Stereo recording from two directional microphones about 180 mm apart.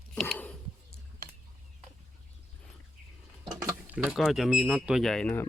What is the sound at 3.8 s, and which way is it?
Speech, 10° right (ahead or behind).